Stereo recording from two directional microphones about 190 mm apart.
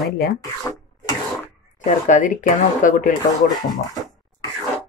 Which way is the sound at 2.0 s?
40° left (ahead or behind).